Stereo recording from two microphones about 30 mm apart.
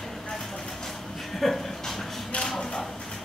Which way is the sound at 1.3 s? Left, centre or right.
Centre.